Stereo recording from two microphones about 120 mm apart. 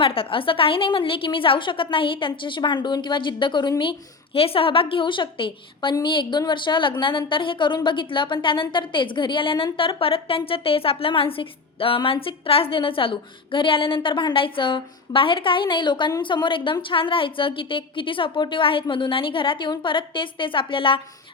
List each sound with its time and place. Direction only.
0.0 s a woman's voice: 50° left (ahead or behind)